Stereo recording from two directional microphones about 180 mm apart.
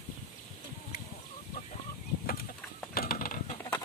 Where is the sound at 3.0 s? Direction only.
55° left (ahead or behind).